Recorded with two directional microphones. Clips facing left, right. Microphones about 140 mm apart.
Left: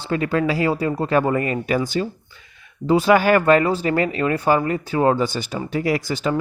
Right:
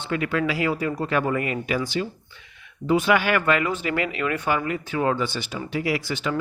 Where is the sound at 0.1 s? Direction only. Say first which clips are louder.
Left 4 dB; 35° left (ahead or behind).